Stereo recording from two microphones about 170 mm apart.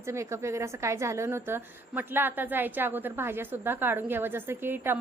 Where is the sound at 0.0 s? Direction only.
15° right (ahead or behind).